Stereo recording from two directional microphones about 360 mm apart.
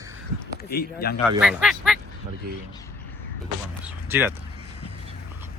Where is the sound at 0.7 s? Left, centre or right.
Left.